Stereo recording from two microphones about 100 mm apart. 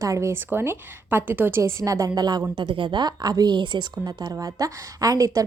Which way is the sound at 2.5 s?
55° right (ahead or behind).